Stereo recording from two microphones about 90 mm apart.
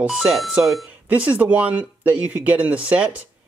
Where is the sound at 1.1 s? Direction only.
15° right (ahead or behind).